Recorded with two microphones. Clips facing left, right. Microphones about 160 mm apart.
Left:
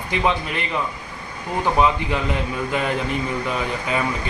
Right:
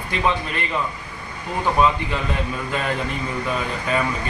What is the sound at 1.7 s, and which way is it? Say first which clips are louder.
Speech: even; 15° left (ahead or behind).